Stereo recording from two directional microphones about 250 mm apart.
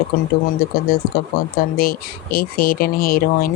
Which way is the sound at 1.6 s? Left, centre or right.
Left.